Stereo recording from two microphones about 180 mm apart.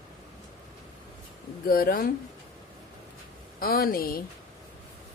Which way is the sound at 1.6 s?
55° left (ahead or behind).